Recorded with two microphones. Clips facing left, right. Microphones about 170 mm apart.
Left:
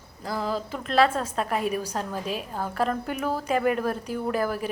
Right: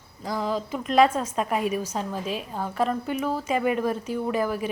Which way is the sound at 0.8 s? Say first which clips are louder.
Right 2 dB; 10° right (ahead or behind).